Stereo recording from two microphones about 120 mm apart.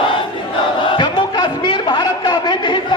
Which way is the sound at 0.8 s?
40° left (ahead or behind).